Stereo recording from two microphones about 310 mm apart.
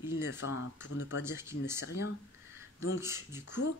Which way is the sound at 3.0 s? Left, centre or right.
Centre.